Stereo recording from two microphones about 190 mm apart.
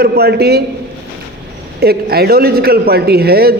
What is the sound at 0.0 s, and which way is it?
Speech, 55° right (ahead or behind).